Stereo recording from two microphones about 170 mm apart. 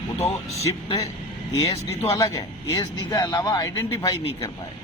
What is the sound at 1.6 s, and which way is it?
Speech, 20° left (ahead or behind).